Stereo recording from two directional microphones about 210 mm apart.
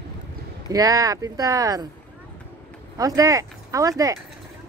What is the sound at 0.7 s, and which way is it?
Speech, 15° right (ahead or behind).